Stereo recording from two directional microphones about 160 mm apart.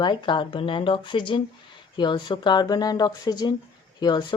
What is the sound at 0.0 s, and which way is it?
Speech, 30° left (ahead or behind).